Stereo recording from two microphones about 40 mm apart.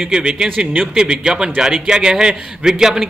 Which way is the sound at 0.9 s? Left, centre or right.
Right.